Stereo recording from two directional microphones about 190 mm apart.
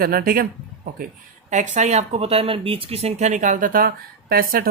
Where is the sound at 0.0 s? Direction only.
50° right (ahead or behind).